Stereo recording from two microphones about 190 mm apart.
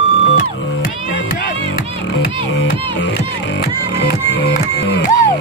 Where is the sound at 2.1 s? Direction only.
75° left (ahead or behind).